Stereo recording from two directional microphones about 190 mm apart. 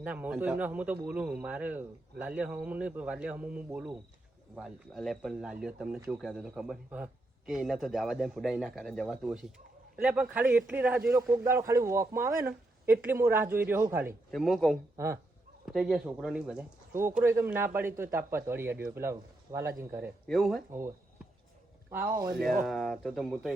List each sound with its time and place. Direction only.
0.0 s a man's voice: 10° right (ahead or behind)
14.3 s a man's voice: centre (ahead or behind)
14.9 s speech: 15° right (ahead or behind)
15.6 s a man's voice: centre (ahead or behind)
20.2 s a man's voice: centre (ahead or behind)
20.7 s a sound: 15° right (ahead or behind)
21.8 s a man's voice: 10° right (ahead or behind)
22.4 s speech: 50° right (ahead or behind)
22.6 s a man's voice: centre (ahead or behind)